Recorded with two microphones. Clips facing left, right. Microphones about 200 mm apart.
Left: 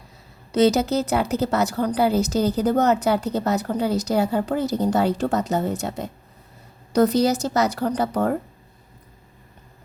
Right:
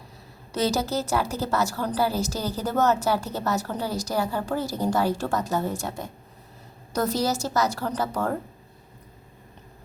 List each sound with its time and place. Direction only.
0.5 s a woman's voice: 20° left (ahead or behind)
7.1 s a woman's voice: 20° left (ahead or behind)